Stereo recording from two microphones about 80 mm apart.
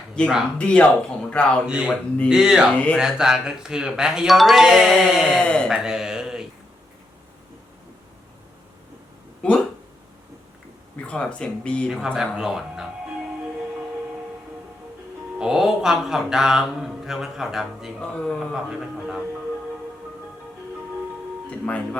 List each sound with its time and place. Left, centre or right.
0.2 s speech: centre
1.6 s speech: centre
1.9 s speech: centre
2.3 s speech: centre
2.7 s speech: centre
3.0 s speech: centre
5.4 s speech: centre
5.7 s a sound: centre
9.4 s speech: centre
11.0 s speech: centre
12.0 s mantra: centre
15.4 s mantra: centre
18.0 s speech: centre
18.3 s mantra: centre